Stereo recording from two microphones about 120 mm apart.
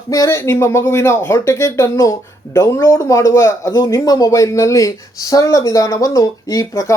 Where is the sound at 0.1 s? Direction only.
25° left (ahead or behind).